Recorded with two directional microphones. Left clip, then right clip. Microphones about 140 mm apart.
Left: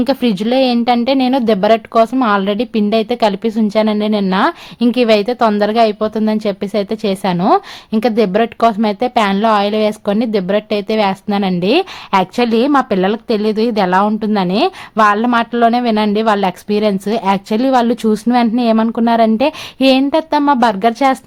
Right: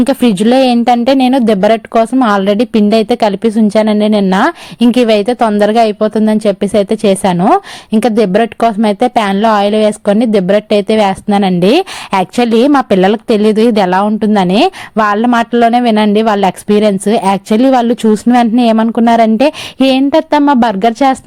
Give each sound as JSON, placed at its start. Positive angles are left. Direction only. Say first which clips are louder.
{"t": 0.0, "sound": "a woman's voice", "louder": "right 5 dB", "side_deg": -45}
{"t": 7.9, "sound": "a woman's voice", "louder": "right 4 dB", "side_deg": -45}